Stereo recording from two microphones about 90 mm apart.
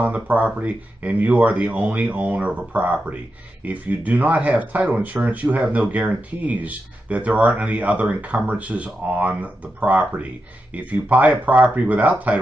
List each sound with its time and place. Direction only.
0.0 s speech: 15° right (ahead or behind)